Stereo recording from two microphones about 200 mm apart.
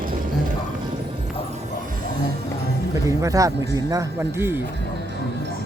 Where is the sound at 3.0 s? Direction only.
15° right (ahead or behind).